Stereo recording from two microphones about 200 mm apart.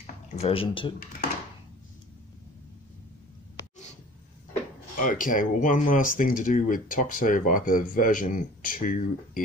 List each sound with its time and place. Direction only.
0.0 s speech: 30° left (ahead or behind)
4.9 s speech: 40° left (ahead or behind)